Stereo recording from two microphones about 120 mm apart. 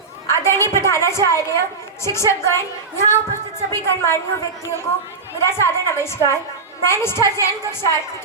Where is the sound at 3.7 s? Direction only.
20° left (ahead or behind).